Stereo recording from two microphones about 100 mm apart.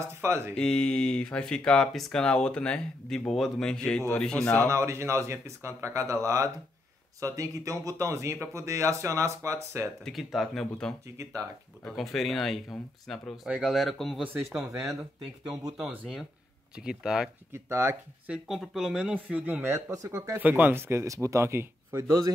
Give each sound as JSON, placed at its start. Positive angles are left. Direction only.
{"t": 0.0, "sound": "speech", "side_deg": -25}
{"t": 0.6, "sound": "speech", "side_deg": 5}
{"t": 4.6, "sound": "speech", "side_deg": -30}
{"t": 10.0, "sound": "speech", "side_deg": 0}
{"t": 11.2, "sound": "speech", "side_deg": -30}
{"t": 11.8, "sound": "speech", "side_deg": 0}
{"t": 14.2, "sound": "speech", "side_deg": -20}
{"t": 16.7, "sound": "speech", "side_deg": -5}
{"t": 17.5, "sound": "speech", "side_deg": -25}
{"t": 18.3, "sound": "speech", "side_deg": -5}
{"t": 19.1, "sound": "speech", "side_deg": -15}